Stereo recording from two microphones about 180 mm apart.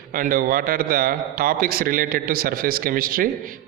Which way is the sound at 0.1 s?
50° right (ahead or behind).